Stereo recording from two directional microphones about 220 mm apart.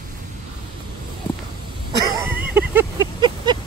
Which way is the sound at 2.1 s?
10° right (ahead or behind).